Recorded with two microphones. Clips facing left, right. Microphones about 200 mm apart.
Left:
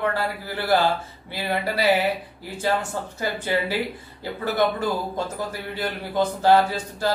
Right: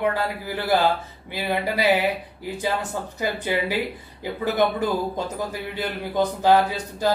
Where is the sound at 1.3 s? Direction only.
15° right (ahead or behind).